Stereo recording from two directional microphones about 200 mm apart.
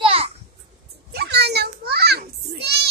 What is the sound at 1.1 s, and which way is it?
Children playing, 55° right (ahead or behind).